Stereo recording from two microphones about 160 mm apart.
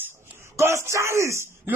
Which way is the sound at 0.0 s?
15° right (ahead or behind).